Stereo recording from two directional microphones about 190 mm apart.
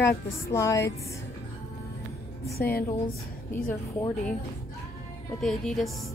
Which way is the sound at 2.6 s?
50° left (ahead or behind).